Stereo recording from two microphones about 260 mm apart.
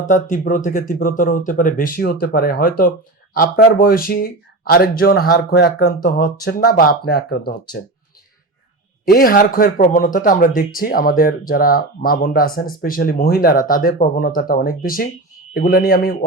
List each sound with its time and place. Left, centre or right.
0.1 s speech: left
9.0 s speech: left